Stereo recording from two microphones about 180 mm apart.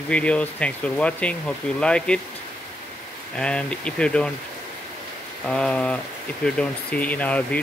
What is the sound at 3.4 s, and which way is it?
Speech, 5° left (ahead or behind).